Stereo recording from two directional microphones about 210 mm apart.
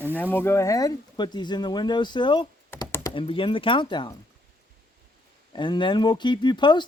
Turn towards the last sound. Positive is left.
turn(degrees=20)  # may be behind; listen again after turning